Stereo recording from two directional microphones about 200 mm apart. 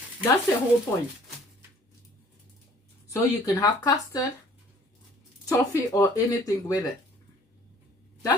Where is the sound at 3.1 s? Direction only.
15° left (ahead or behind).